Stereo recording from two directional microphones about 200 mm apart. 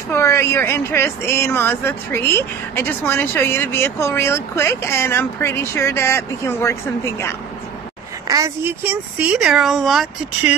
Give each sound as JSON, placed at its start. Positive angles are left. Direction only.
{"t": 0.1, "sound": "speech", "side_deg": 15}
{"t": 8.3, "sound": "speech", "side_deg": -15}